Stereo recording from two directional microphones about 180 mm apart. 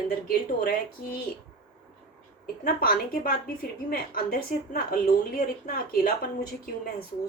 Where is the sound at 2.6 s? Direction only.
55° left (ahead or behind).